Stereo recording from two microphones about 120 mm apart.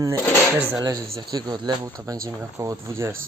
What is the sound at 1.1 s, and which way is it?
Speech, 35° right (ahead or behind).